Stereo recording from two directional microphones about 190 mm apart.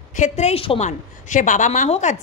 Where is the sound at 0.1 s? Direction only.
40° left (ahead or behind).